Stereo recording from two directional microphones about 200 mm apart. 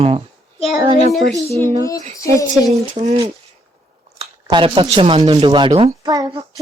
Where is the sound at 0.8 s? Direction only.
25° right (ahead or behind).